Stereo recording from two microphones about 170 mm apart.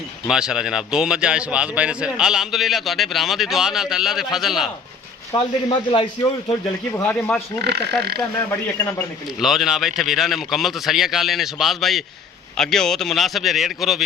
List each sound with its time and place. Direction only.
0.3 s a man's voice: 5° right (ahead or behind)
5.6 s a man's voice: 30° left (ahead or behind)
6.9 s speech: 10° left (ahead or behind)
7.6 s speech: 75° right (ahead or behind)
9.4 s a man's voice: centre (ahead or behind)